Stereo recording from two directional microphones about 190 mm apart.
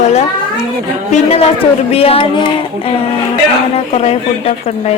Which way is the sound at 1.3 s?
30° left (ahead or behind).